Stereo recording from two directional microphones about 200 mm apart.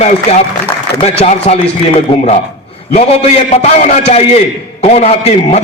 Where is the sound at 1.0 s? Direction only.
30° left (ahead or behind).